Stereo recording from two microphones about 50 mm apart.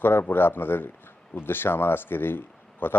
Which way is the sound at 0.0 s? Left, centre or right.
Left.